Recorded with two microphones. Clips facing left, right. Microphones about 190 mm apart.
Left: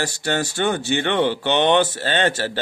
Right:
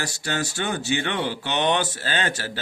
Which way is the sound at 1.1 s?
60° left (ahead or behind).